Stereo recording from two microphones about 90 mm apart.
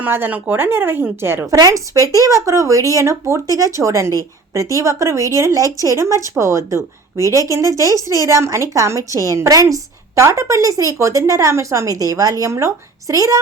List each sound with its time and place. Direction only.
0.0 s a woman's voice: 20° right (ahead or behind)
1.5 s speech: 40° right (ahead or behind)
9.0 s a woman's voice: 35° left (ahead or behind)
9.3 s speech: 35° right (ahead or behind)